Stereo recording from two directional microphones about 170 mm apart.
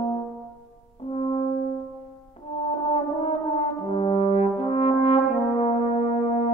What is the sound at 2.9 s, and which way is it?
French horn, 35° left (ahead or behind).